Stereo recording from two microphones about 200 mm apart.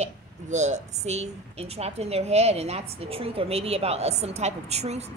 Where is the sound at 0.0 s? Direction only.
35° right (ahead or behind).